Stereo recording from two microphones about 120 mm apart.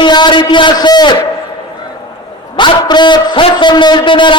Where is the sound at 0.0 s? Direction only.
40° left (ahead or behind).